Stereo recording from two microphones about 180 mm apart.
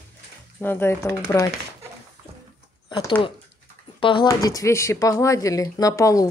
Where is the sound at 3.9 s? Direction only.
25° left (ahead or behind).